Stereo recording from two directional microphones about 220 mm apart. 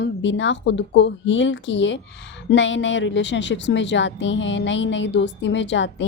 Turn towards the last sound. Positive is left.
turn(degrees=55)  # may be behind; listen again after turning